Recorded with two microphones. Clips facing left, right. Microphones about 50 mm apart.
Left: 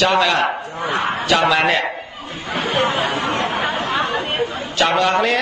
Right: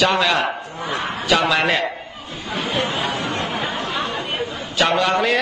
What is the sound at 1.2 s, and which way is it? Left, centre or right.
Speech, centre.